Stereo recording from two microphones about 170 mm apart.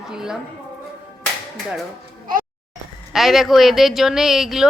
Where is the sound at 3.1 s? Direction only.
Centre (ahead or behind).